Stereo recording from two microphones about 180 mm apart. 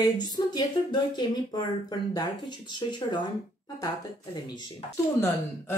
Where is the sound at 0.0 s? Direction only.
25° left (ahead or behind).